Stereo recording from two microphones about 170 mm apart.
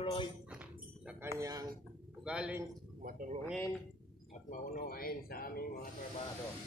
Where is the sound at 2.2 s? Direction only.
5° right (ahead or behind).